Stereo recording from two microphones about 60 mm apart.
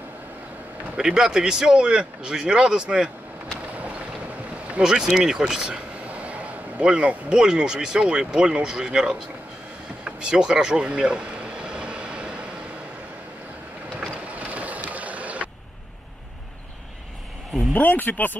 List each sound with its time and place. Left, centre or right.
0.9 s a man's voice: centre
4.7 s speech: centre
10.0 s vehicle: centre
14.2 s vehicle: right
17.7 s speech: left